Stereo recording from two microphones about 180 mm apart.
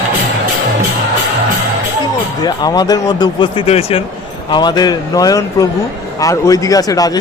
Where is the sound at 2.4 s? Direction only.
20° left (ahead or behind).